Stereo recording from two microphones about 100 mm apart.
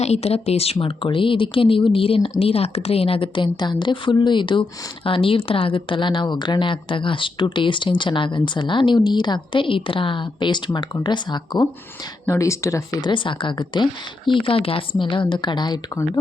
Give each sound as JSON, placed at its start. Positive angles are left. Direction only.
{"t": 0.0, "sound": "speech", "side_deg": 90}
{"t": 2.4, "sound": "speech", "side_deg": 80}
{"t": 12.2, "sound": "speech", "side_deg": 30}
{"t": 13.0, "sound": "speech", "side_deg": 55}